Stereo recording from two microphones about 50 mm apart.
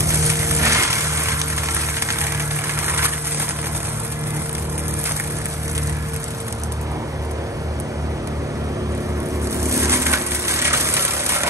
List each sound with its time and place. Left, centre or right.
0.0 s music: right
9.7 s crushing: right